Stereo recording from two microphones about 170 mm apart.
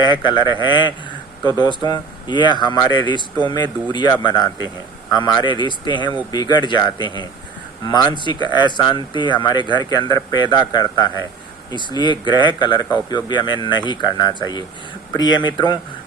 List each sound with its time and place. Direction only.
0.0 s speech: 25° left (ahead or behind)